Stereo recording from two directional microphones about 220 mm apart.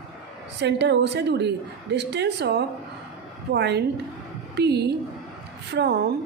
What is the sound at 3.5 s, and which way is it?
A woman's voice, 50° right (ahead or behind).